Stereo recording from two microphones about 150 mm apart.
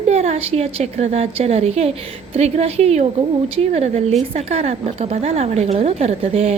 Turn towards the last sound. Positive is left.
turn(degrees=-40)  # may be behind; listen again after turning